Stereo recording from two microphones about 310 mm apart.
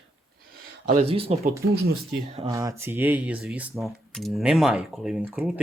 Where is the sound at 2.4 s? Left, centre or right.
Centre.